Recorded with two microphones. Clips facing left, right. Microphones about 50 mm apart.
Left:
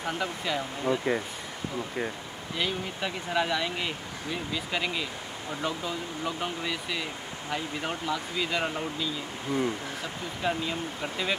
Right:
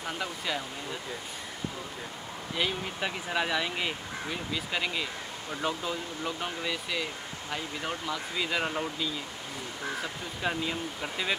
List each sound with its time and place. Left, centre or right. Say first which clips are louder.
0.0 s speech: left 3 dB; centre
0.8 s speech: left 11 dB; left
2.5 s speech: even; centre
8.1 s speech: left 2 dB; centre
10.4 s speech: left 1 dB; centre